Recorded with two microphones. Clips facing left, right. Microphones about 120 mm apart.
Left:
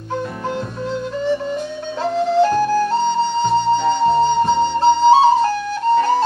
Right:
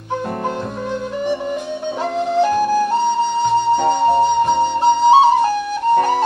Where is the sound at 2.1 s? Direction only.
15° right (ahead or behind).